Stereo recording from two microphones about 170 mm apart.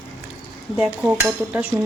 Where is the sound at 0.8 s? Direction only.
5° right (ahead or behind).